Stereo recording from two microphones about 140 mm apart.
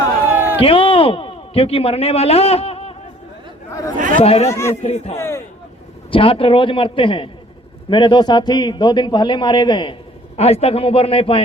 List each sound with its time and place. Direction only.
0.3 s a sound: 15° right (ahead or behind)
0.6 s speech: 40° left (ahead or behind)
3.7 s chatter: 25° left (ahead or behind)
3.9 s chatter: 70° right (ahead or behind)
4.2 s a man's voice: 45° left (ahead or behind)
4.4 s speech: 20° left (ahead or behind)
4.8 s a man's voice: 50° left (ahead or behind)
5.1 s a sound: 20° left (ahead or behind)
6.1 s a man's voice: 40° left (ahead or behind)
10.3 s a man's voice: 45° left (ahead or behind)